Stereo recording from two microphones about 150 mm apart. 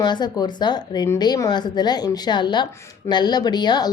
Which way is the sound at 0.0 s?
30° left (ahead or behind).